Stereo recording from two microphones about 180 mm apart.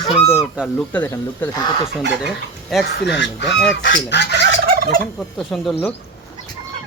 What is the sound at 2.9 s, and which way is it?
Speech, 70° left (ahead or behind).